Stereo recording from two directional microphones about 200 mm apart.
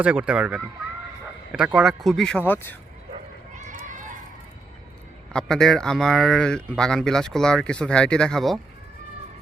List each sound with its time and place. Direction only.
0.0 s speech: 5° right (ahead or behind); by 2.7 s 10° left (ahead or behind)
3.1 s a sound: 40° right (ahead or behind)
5.3 s speech: 5° left (ahead or behind)